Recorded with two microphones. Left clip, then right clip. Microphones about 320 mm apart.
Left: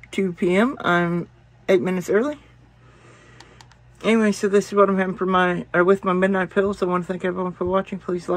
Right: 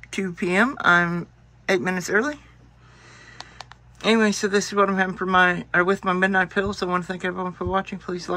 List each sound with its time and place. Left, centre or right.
0.1 s speech: centre
3.3 s camera: right
4.0 s speech: centre